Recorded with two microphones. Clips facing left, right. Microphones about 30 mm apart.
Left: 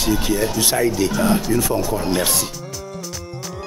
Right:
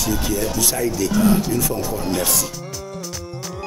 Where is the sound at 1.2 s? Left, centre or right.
Left.